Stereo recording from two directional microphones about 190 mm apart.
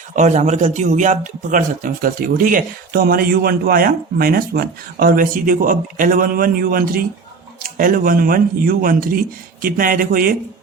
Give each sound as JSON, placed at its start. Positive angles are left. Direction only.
{"t": 0.2, "sound": "a man's voice", "side_deg": -40}